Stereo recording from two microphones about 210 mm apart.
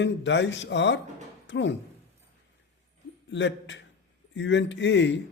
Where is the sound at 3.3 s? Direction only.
60° left (ahead or behind).